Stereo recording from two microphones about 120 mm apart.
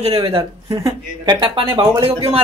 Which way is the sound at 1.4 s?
45° right (ahead or behind).